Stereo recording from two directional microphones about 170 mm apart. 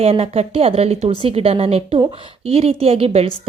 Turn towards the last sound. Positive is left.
turn(degrees=-35)  # may be behind; listen again after turning